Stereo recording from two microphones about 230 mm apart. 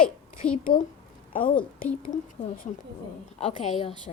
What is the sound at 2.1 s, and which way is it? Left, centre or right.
Speech, left.